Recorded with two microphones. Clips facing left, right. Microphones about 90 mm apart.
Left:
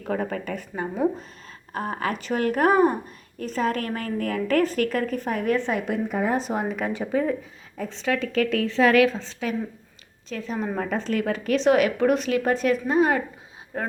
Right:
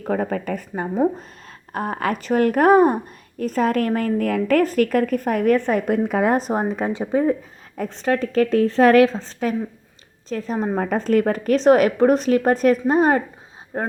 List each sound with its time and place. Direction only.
0.0 s a woman's voice: 40° right (ahead or behind)
6.1 s speech: 90° right
6.3 s a woman's voice: 40° right (ahead or behind)
7.8 s a woman's voice: 50° right (ahead or behind)
13.7 s a woman's voice: 30° right (ahead or behind)